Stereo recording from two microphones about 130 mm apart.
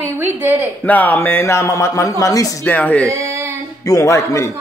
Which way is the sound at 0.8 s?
10° left (ahead or behind).